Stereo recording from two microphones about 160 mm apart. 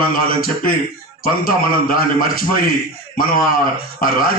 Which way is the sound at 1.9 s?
60° left (ahead or behind).